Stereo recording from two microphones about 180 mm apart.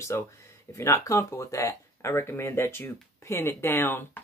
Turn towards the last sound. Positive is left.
turn(degrees=10)  # may be behind; listen again after turning